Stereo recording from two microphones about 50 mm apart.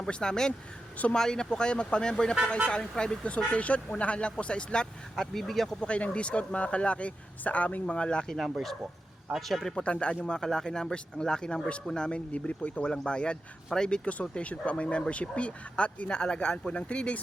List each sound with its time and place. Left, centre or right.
0.0 s speech: centre
3.2 s speech: left
5.1 s speech: centre
5.8 s speech: left
8.4 s speech: centre
9.7 s speech: left